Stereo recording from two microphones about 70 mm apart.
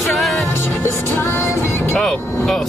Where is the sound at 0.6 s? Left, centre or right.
Left.